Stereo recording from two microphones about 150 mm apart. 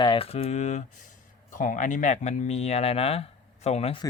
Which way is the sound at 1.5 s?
60° left (ahead or behind).